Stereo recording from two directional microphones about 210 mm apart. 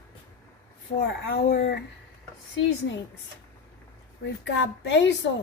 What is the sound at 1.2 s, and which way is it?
Speech, 50° left (ahead or behind).